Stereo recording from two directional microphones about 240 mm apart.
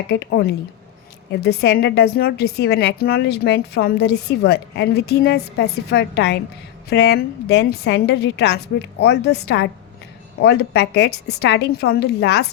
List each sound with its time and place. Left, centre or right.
0.1 s a woman's voice: left